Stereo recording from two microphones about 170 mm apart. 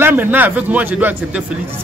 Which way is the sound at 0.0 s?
10° right (ahead or behind).